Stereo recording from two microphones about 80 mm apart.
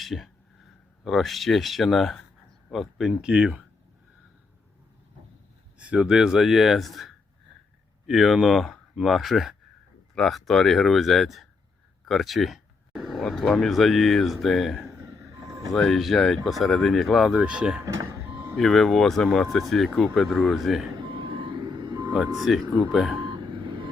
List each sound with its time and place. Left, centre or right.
0.0 s speech: centre
5.8 s speech: centre
12.0 s a sound: centre
13.2 s speech: centre
14.8 s vehicle: right
15.7 s speech: centre
17.3 s speech: centre
17.8 s vehicle: right
18.5 s speech: centre
21.0 s vehicle: right
22.4 s speech: centre
23.2 s vehicle: right